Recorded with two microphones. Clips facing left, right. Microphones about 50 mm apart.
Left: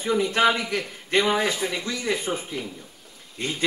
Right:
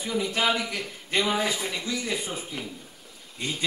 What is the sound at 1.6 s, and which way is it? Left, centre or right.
Speech, centre.